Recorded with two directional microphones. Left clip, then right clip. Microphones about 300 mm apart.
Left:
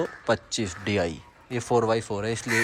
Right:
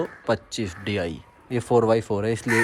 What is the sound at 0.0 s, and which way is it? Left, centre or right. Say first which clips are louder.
Speech: right 1 dB; centre.